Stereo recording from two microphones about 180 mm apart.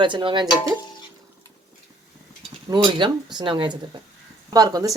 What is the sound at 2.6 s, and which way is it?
Speech, 25° right (ahead or behind).